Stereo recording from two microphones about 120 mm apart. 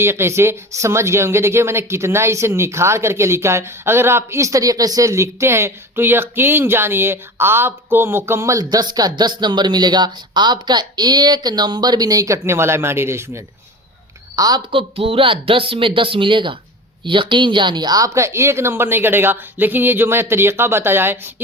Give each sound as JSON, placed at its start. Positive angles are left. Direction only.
{"t": 0.0, "sound": "speech", "side_deg": -20}
{"t": 14.3, "sound": "a woman's voice", "side_deg": -30}
{"t": 14.7, "sound": "speech", "side_deg": -50}